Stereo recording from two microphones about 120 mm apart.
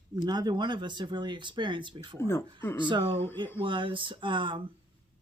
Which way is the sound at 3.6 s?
45° right (ahead or behind).